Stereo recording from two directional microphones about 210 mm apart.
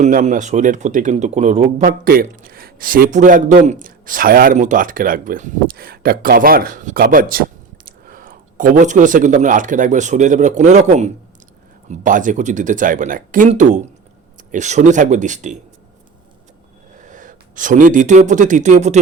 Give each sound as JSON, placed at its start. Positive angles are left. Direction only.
{"t": 0.0, "sound": "speech", "side_deg": -35}
{"t": 17.0, "sound": "speech", "side_deg": -40}